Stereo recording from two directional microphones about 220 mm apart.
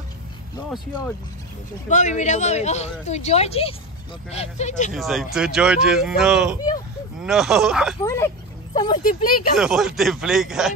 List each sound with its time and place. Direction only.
1.9 s a woman's voice: 35° left (ahead or behind)
4.9 s speech: centre (ahead or behind)
8.0 s speech: 15° left (ahead or behind)
9.0 s a woman's voice: 40° left (ahead or behind)
9.6 s speech: 5° right (ahead or behind)